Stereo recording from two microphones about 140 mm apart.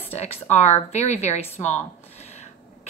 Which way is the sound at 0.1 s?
50° left (ahead or behind).